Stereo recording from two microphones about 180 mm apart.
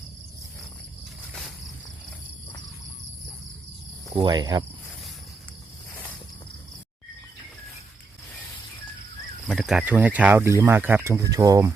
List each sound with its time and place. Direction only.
1.3 s insect: centre (ahead or behind)
4.2 s cricket: 25° right (ahead or behind)
9.5 s speech: centre (ahead or behind); by 11.7 s 20° right (ahead or behind)